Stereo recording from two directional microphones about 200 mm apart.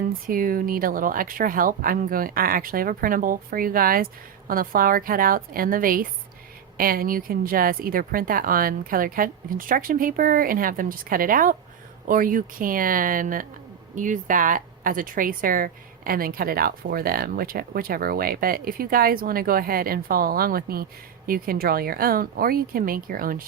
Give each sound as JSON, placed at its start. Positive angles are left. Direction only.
{"t": 0.1, "sound": "speech", "side_deg": -45}